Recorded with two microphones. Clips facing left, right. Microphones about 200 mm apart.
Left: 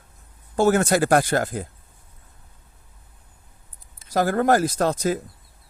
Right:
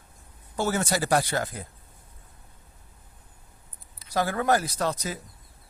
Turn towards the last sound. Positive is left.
turn(degrees=50)  # may be behind; listen again after turning